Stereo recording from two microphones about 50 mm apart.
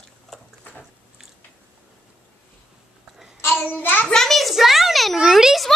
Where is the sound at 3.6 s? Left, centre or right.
Left.